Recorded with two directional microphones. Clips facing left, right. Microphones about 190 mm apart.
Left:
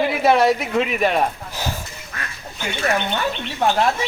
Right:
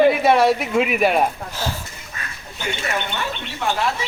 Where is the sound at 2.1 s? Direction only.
70° left (ahead or behind).